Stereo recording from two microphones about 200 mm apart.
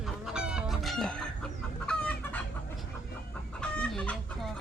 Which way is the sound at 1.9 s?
5° left (ahead or behind).